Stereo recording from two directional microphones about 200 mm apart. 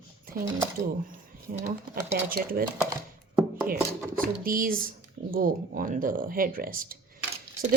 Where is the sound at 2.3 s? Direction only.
45° right (ahead or behind).